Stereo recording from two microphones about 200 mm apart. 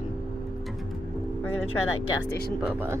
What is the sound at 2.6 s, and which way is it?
Speech, 10° right (ahead or behind).